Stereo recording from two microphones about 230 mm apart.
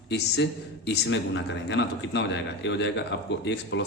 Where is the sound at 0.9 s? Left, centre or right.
Left.